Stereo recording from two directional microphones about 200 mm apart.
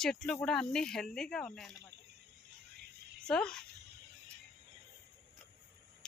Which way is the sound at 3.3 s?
5° left (ahead or behind).